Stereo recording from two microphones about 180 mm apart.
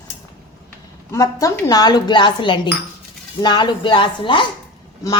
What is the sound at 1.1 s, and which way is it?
Speech, 20° left (ahead or behind).